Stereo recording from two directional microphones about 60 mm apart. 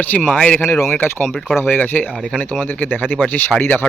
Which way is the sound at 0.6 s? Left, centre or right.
Left.